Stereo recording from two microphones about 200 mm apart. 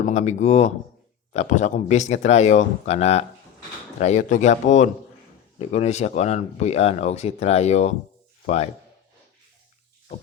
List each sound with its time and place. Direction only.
0.0 s speech: 35° left (ahead or behind)